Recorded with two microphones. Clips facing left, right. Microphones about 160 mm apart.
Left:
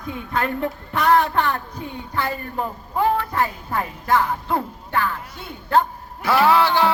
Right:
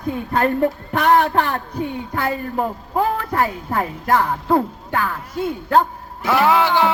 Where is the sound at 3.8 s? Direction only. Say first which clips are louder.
Right 2 dB; 40° right (ahead or behind).